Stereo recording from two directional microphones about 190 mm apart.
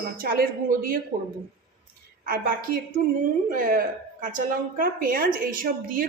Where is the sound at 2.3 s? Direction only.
50° right (ahead or behind).